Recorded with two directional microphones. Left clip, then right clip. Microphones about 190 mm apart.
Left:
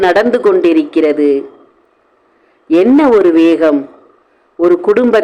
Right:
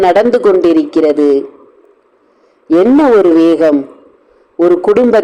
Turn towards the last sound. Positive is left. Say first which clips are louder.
# right 1 dB
turn(degrees=-10)  # may be behind; listen again after turning